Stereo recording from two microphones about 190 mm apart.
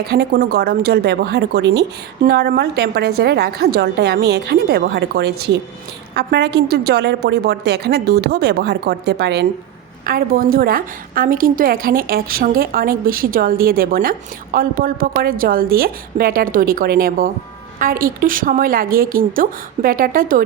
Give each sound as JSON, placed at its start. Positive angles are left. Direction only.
{"t": 0.1, "sound": "a woman's voice", "side_deg": -55}